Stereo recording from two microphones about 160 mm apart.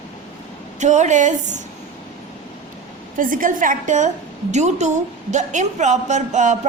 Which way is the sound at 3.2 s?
55° right (ahead or behind).